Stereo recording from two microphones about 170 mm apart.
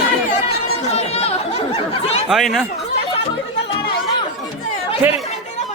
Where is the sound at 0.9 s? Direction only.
40° left (ahead or behind).